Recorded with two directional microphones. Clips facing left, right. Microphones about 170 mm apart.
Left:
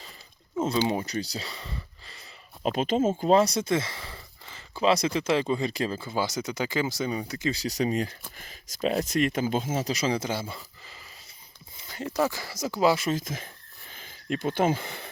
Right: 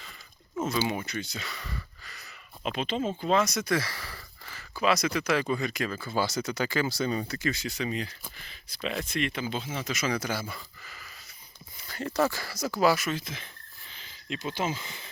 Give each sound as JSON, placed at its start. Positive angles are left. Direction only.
{"t": 0.9, "sound": "speech", "side_deg": 35}
{"t": 2.6, "sound": "speech", "side_deg": 45}
{"t": 6.1, "sound": "speech", "side_deg": 15}
{"t": 7.5, "sound": "speech", "side_deg": 40}
{"t": 13.1, "sound": "speech", "side_deg": 45}